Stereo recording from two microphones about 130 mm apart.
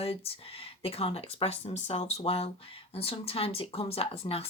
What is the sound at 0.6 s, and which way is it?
Speech, 50° left (ahead or behind).